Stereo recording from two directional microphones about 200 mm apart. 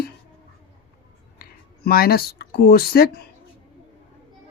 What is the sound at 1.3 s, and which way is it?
Speech, 50° left (ahead or behind).